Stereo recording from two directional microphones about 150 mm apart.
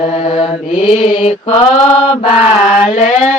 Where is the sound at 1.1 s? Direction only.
35° left (ahead or behind).